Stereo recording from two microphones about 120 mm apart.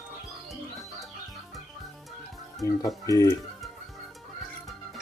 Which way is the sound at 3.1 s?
30° left (ahead or behind).